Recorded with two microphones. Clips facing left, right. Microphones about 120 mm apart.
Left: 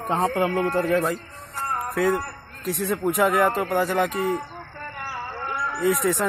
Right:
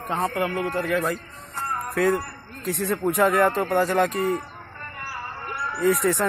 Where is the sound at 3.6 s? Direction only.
Centre (ahead or behind).